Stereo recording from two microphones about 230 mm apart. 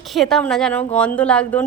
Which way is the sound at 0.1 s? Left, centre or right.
Centre.